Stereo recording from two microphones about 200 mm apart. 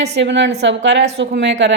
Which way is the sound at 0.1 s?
60° right (ahead or behind).